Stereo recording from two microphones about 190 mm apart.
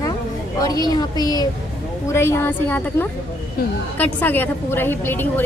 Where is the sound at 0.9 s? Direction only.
20° left (ahead or behind).